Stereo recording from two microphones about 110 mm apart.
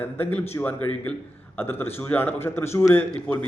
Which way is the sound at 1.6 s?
20° left (ahead or behind).